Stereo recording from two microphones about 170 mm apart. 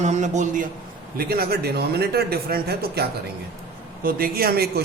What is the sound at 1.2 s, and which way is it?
A man's voice, 65° right (ahead or behind).